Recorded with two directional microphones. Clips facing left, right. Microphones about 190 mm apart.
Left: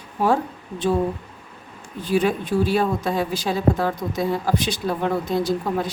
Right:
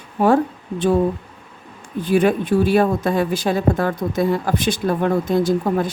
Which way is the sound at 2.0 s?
55° right (ahead or behind).